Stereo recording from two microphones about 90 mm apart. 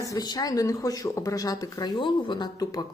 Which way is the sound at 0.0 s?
45° left (ahead or behind).